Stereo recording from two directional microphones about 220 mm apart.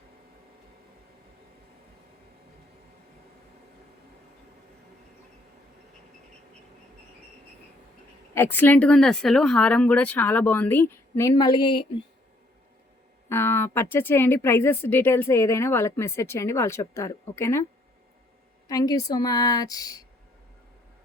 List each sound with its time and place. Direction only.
8.4 s speech: 10° left (ahead or behind)
13.2 s speech: 10° left (ahead or behind)
18.7 s speech: 15° left (ahead or behind)